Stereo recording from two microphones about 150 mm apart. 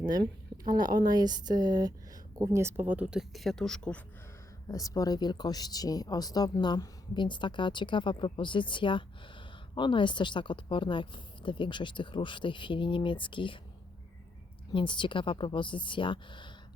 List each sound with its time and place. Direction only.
0.0 s speech: 30° right (ahead or behind); by 4.0 s 5° left (ahead or behind)
4.7 s speech: 25° left (ahead or behind)
14.7 s speech: 30° left (ahead or behind)